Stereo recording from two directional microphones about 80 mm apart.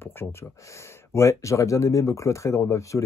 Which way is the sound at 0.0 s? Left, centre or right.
Left.